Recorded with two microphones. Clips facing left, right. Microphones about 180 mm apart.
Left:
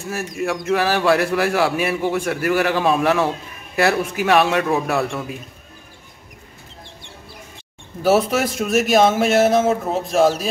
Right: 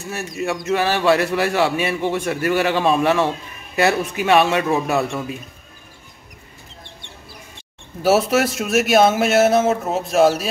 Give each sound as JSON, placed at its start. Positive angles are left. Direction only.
{"t": 0.1, "sound": "a man's voice", "side_deg": 0}
{"t": 8.0, "sound": "a man's voice", "side_deg": -5}